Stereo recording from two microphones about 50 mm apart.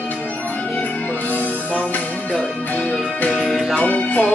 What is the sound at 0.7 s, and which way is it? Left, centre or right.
Music, left.